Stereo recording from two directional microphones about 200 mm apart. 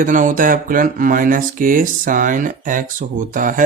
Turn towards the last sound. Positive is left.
turn(degrees=-40)  # may be behind; listen again after turning